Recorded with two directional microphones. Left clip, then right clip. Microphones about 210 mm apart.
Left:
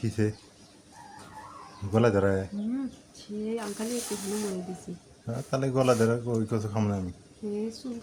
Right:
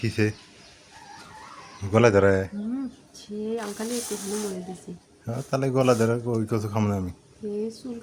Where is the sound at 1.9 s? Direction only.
20° right (ahead or behind).